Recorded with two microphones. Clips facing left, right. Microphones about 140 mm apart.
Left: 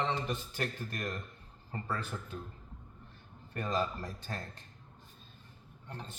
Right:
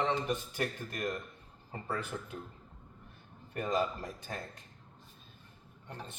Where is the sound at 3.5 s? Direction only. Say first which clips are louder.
Right 2 dB; 15° right (ahead or behind).